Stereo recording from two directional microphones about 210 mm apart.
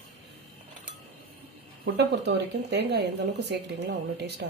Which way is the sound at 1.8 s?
55° right (ahead or behind).